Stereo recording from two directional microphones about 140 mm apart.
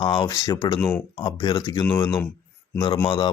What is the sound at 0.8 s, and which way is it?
Speech, 15° left (ahead or behind).